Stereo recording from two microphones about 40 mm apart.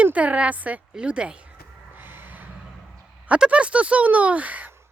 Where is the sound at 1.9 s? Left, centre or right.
Right.